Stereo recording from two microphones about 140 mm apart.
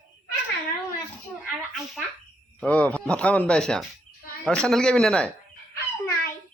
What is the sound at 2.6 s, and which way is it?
Speech, 10° left (ahead or behind).